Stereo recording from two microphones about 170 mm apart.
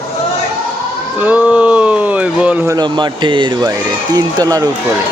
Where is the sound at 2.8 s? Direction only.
25° right (ahead or behind).